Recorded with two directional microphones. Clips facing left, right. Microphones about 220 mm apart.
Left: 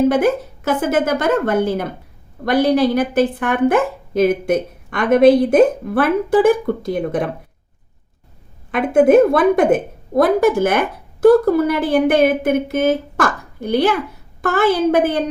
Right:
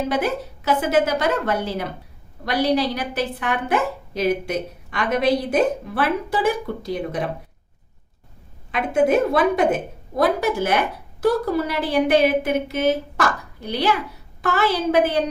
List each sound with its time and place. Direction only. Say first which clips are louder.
0.1 s a woman's voice: left 7 dB; 50° left (ahead or behind)
8.7 s a woman's voice: left 7 dB; 50° left (ahead or behind)